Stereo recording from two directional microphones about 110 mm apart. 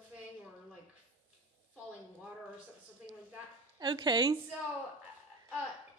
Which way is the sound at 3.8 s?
40° right (ahead or behind).